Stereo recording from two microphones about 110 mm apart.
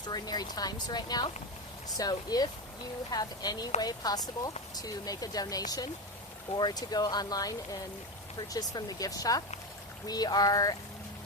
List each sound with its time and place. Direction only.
0.0 s speech: 40° left (ahead or behind)